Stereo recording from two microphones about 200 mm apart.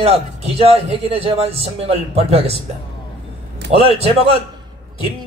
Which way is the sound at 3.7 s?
30° right (ahead or behind).